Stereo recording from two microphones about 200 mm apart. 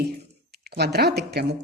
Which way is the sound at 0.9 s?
55° right (ahead or behind).